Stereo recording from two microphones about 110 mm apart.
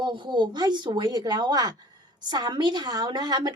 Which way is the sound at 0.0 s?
45° right (ahead or behind).